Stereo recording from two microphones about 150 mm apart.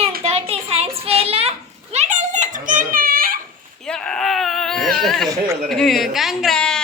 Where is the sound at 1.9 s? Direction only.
50° right (ahead or behind); by 3.4 s 75° right (ahead or behind).